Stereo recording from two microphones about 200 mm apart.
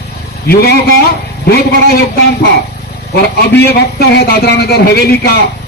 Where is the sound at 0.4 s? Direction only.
50° left (ahead or behind).